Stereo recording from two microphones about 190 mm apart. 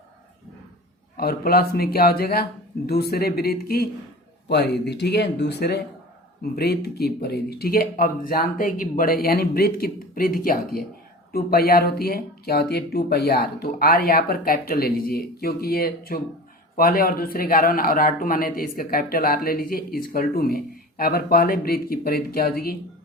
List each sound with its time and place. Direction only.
1.1 s speech: 55° left (ahead or behind)